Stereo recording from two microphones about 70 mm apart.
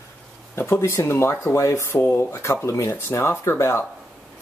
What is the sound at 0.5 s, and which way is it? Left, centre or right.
Speech, left.